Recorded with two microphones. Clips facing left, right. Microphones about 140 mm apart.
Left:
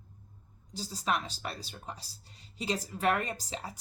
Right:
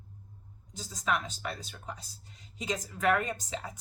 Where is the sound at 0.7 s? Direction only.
35° left (ahead or behind).